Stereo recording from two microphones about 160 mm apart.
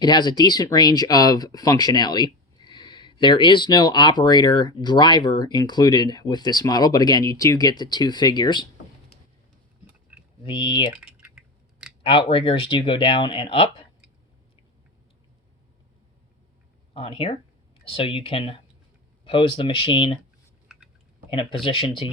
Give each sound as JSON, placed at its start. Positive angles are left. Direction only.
{"t": 0.0, "sound": "speech", "side_deg": 25}
{"t": 10.4, "sound": "speech", "side_deg": 30}
{"t": 10.9, "sound": "typing", "side_deg": -5}
{"t": 12.0, "sound": "speech", "side_deg": 30}
{"t": 16.9, "sound": "speech", "side_deg": 35}
{"t": 20.7, "sound": "typing", "side_deg": -5}
{"t": 21.2, "sound": "speech", "side_deg": 30}